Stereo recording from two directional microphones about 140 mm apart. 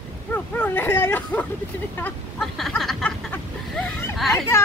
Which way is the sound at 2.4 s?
Centre (ahead or behind).